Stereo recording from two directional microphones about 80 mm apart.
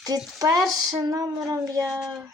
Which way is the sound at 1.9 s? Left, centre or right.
Centre.